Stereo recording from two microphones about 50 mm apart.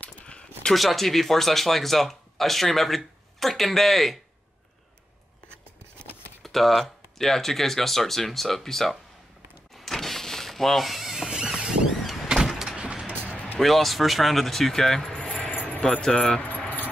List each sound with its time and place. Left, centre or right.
0.0 s a sound: left
0.7 s speech: centre
6.4 s speech: centre
9.8 s power windows: centre
12.1 s door: centre
12.7 s a sound: right
13.6 s speech: centre
15.5 s keys jangling: left
16.0 s speech: centre
16.4 s keys jangling: left